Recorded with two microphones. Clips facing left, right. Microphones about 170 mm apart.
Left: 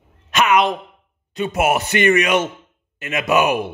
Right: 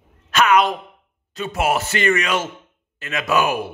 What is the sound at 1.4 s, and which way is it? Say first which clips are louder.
A man's voice: left 2 dB; 20° left (ahead or behind).